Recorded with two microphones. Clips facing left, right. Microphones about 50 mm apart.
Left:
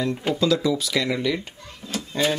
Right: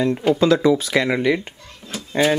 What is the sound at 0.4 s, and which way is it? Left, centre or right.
Speech, right.